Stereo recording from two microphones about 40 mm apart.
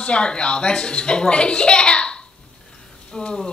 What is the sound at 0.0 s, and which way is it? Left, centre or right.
A woman's voice, left.